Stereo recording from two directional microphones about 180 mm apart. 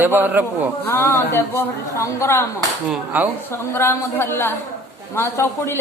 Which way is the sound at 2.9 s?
10° right (ahead or behind).